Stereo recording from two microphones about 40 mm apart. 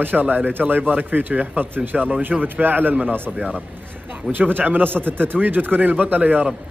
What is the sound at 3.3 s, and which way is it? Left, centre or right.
Speech, centre.